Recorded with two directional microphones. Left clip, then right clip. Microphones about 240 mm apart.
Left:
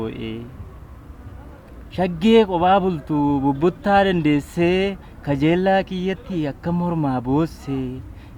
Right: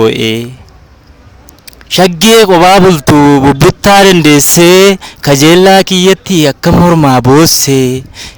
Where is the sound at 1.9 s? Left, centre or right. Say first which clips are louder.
Right 12 dB; right.